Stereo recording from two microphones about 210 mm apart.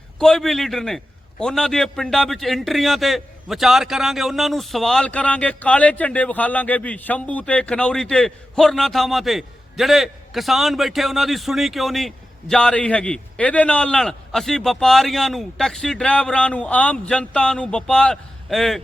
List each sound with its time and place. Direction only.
0.2 s a man's voice: centre (ahead or behind)